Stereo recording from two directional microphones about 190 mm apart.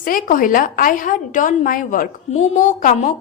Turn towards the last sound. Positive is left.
turn(degrees=40)  # may be behind; listen again after turning